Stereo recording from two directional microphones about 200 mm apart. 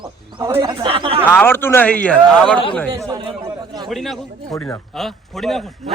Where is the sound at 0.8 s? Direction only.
25° right (ahead or behind).